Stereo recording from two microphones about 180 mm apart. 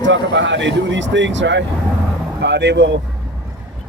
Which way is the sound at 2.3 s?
70° right (ahead or behind).